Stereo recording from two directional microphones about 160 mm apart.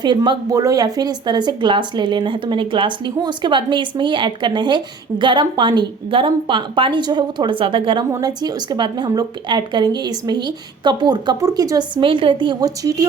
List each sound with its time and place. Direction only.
0.0 s speech: 30° right (ahead or behind)